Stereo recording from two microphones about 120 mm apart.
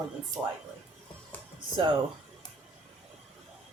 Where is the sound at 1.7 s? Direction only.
40° right (ahead or behind).